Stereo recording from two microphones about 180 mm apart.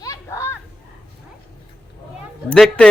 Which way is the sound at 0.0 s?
20° left (ahead or behind).